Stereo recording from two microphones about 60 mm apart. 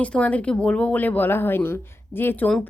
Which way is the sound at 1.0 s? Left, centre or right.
Left.